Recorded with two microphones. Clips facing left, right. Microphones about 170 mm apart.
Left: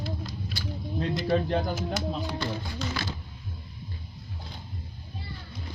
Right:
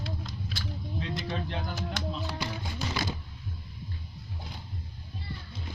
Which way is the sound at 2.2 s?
10° right (ahead or behind).